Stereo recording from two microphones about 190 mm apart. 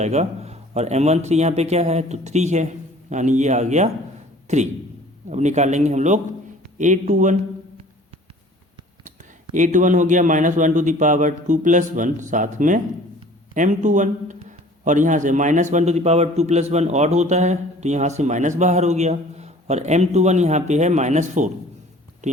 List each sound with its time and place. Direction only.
0.0 s a man's voice: 35° right (ahead or behind)
9.6 s a man's voice: 40° right (ahead or behind)
22.2 s a sound: 40° right (ahead or behind)